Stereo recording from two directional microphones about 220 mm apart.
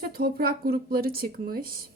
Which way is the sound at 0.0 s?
45° right (ahead or behind).